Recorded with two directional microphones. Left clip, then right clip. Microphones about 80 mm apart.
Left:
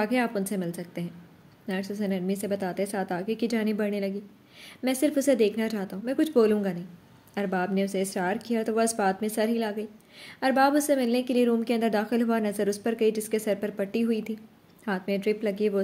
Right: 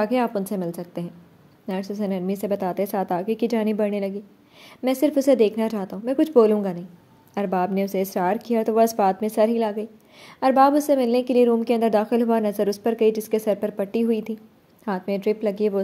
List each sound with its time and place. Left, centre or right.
0.0 s a woman's voice: right